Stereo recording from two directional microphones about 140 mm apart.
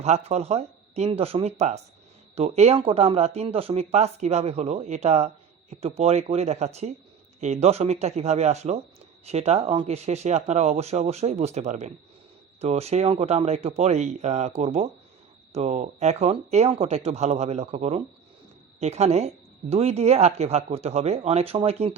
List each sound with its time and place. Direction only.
0.0 s speech: 50° right (ahead or behind)